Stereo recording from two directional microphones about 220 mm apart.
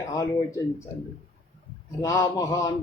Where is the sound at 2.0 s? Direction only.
15° left (ahead or behind).